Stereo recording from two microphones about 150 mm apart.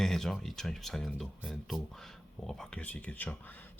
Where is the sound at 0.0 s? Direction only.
5° left (ahead or behind).